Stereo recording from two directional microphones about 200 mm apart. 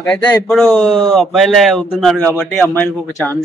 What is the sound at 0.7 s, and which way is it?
A man's voice, 5° left (ahead or behind).